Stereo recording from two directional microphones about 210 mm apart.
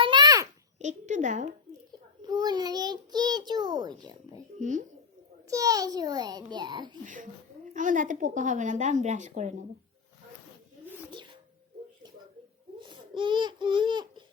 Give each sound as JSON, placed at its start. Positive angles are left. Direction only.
{"t": 0.0, "sound": "a sound", "side_deg": -20}
{"t": 0.8, "sound": "speech", "side_deg": -35}
{"t": 2.2, "sound": "a child's voice", "side_deg": -20}
{"t": 4.6, "sound": "speech", "side_deg": -35}
{"t": 5.5, "sound": "a child's voice", "side_deg": -15}
{"t": 7.0, "sound": "speech", "side_deg": -40}
{"t": 12.8, "sound": "babbling", "side_deg": -25}